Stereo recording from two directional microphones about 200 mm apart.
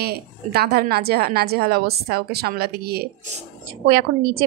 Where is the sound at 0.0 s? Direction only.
50° right (ahead or behind).